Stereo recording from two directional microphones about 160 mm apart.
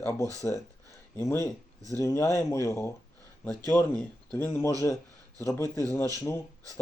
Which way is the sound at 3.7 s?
5° left (ahead or behind).